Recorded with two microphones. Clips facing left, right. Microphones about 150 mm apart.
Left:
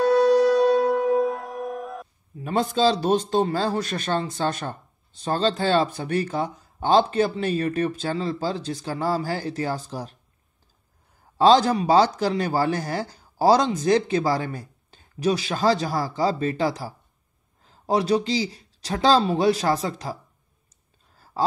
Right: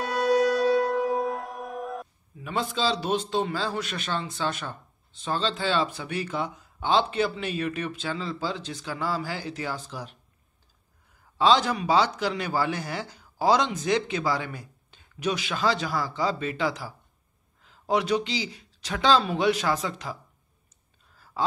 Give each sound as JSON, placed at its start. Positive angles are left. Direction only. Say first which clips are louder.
{"t": 0.8, "sound": "music", "louder": "left 5 dB", "side_deg": 0}
{"t": 2.4, "sound": "a man's voice", "louder": "left 7 dB", "side_deg": 45}
{"t": 11.3, "sound": "a man's voice", "louder": "left 5 dB", "side_deg": 40}
{"t": 21.2, "sound": "a sound", "louder": "left 4 dB", "side_deg": 35}